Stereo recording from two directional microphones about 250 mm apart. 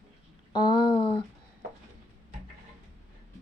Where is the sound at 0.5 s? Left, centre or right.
Centre.